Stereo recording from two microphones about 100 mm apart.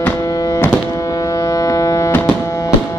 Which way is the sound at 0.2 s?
35° left (ahead or behind).